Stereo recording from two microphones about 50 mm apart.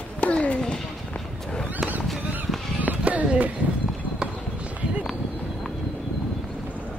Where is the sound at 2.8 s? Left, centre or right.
Right.